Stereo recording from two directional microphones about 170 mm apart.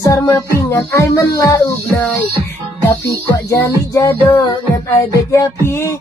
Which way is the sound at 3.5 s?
20° left (ahead or behind).